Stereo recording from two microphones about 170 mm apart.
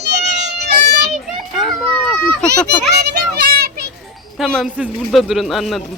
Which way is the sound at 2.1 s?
10° left (ahead or behind).